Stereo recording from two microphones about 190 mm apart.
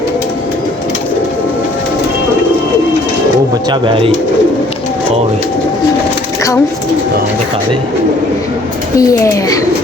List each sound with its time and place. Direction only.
3.7 s speech: 25° right (ahead or behind)
9.0 s speech: 15° left (ahead or behind)